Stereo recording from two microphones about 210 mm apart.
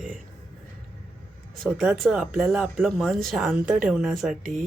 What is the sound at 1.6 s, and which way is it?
Speech, centre (ahead or behind).